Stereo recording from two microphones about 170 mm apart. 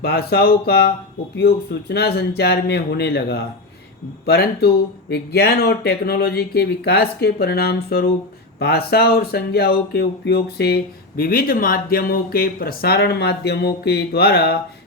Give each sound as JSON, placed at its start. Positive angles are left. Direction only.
{"t": 0.0, "sound": "speech", "side_deg": 65}
{"t": 11.2, "sound": "speech", "side_deg": 60}